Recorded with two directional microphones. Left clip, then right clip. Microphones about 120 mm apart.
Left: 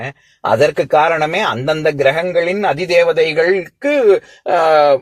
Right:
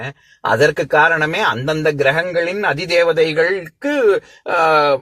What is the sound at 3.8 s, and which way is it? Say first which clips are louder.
Speech: left 3 dB; 45° left (ahead or behind).